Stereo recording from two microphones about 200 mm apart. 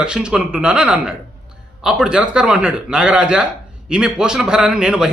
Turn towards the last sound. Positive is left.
turn(degrees=-5)  # may be behind; listen again after turning